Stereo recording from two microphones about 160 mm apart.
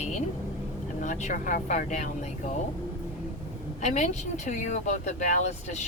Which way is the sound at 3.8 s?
45° left (ahead or behind).